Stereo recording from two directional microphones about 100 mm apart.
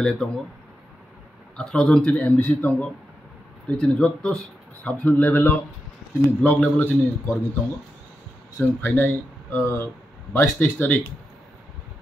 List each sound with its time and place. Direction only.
0.0 s a man's voice: 5° left (ahead or behind)
1.6 s a man's voice: 10° left (ahead or behind)
8.5 s speech: 20° left (ahead or behind)